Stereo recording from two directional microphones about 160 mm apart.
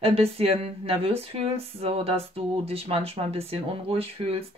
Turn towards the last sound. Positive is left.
turn(degrees=-35)  # may be behind; listen again after turning